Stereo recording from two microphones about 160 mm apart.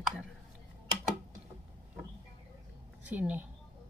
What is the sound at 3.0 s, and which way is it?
Speech, 10° right (ahead or behind).